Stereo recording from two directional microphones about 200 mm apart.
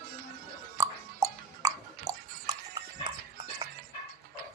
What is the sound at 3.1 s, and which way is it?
Music, 25° right (ahead or behind).